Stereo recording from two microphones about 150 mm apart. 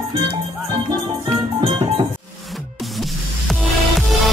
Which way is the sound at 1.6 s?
35° right (ahead or behind).